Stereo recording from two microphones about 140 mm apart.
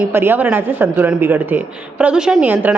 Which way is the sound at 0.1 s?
15° right (ahead or behind).